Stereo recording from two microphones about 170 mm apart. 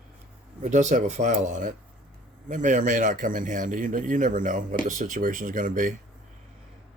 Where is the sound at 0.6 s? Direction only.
45° right (ahead or behind).